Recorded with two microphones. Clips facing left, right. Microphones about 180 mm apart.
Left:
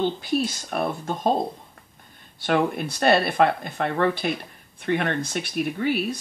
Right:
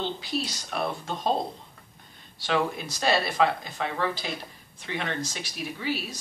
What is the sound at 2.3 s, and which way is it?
Speech, 55° left (ahead or behind).